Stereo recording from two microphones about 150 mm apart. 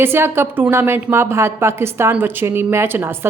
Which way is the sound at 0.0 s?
15° right (ahead or behind).